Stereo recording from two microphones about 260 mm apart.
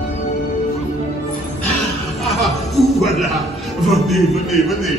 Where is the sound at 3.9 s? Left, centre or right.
Centre.